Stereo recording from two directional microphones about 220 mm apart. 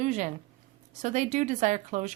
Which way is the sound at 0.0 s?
35° right (ahead or behind).